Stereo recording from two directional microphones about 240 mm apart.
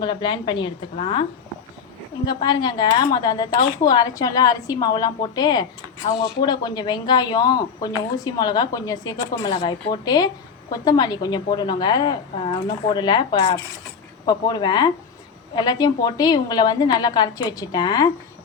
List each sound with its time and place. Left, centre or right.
0.0 s a woman's voice: centre
2.2 s speech: centre